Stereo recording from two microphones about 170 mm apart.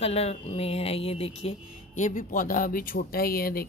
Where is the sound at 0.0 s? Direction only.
35° left (ahead or behind).